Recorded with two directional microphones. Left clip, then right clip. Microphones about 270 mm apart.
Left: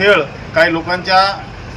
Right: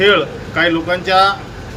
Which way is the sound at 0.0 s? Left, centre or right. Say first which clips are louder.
Left 1 dB; centre.